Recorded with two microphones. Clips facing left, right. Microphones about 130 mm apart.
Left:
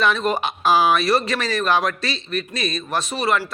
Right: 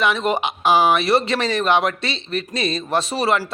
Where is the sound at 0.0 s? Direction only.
20° right (ahead or behind).